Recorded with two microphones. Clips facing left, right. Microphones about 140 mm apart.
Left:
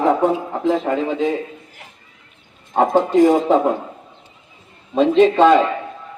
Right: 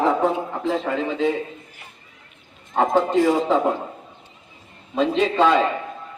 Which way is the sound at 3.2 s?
50° left (ahead or behind).